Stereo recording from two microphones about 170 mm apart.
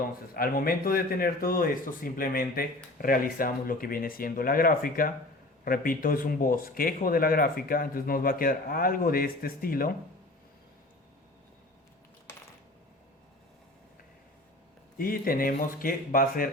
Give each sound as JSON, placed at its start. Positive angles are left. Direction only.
{"t": 0.3, "sound": "a man's voice", "side_deg": 60}
{"t": 14.9, "sound": "a man's voice", "side_deg": 55}